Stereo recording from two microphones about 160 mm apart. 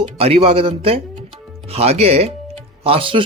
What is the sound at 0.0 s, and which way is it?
Speech, 40° right (ahead or behind).